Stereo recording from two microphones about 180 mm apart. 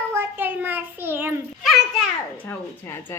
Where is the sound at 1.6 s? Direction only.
Centre (ahead or behind).